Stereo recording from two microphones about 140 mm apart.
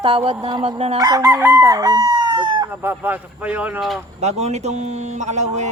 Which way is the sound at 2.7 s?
15° right (ahead or behind).